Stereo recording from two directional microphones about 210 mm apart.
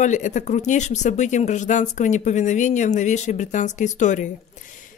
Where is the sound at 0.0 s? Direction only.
35° left (ahead or behind).